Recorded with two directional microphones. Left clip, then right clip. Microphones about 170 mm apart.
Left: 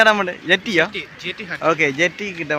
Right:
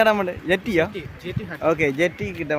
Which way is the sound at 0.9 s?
35° right (ahead or behind).